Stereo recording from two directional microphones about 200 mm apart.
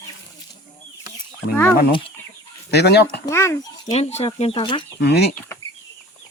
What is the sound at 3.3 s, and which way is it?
Speech, 15° left (ahead or behind).